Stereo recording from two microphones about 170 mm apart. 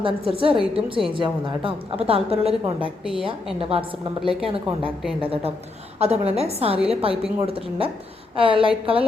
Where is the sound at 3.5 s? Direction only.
35° right (ahead or behind).